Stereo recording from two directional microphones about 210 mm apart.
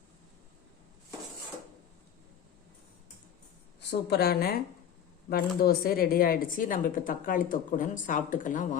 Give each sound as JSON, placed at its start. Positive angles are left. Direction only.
{"t": 4.1, "sound": "a woman's voice", "side_deg": 50}